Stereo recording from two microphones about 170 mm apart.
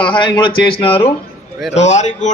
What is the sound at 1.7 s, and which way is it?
Speech, 45° left (ahead or behind).